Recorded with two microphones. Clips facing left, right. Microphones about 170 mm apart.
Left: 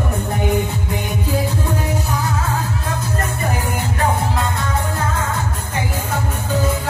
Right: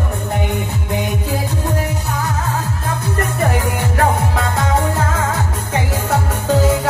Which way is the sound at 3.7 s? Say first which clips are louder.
Right 3 dB; 80° right.